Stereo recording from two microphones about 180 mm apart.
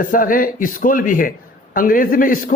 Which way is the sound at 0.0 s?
50° left (ahead or behind).